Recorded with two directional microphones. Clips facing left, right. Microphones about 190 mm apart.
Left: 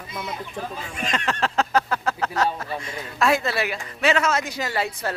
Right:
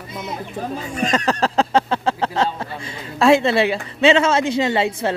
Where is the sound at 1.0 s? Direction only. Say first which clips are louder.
Right 6 dB; 40° right (ahead or behind).